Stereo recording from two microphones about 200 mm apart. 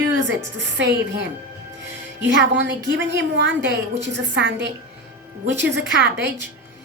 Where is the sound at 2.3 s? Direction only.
65° right (ahead or behind).